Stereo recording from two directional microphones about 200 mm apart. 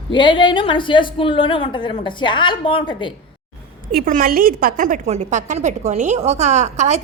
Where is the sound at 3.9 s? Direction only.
45° right (ahead or behind).